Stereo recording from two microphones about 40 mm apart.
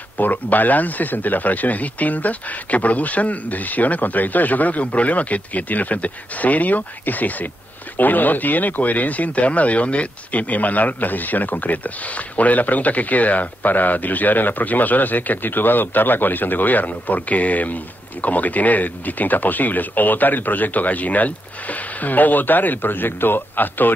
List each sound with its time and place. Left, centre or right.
0.2 s speech: left